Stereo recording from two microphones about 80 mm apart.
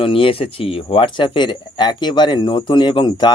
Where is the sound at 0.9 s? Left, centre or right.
Left.